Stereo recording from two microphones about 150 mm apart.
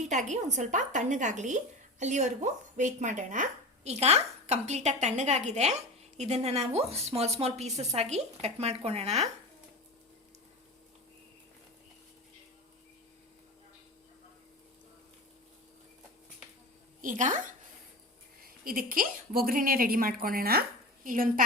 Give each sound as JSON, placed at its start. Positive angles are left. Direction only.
{"t": 0.1, "sound": "speech", "side_deg": -55}
{"t": 17.0, "sound": "a woman's voice", "side_deg": -60}
{"t": 18.4, "sound": "a woman's voice", "side_deg": -70}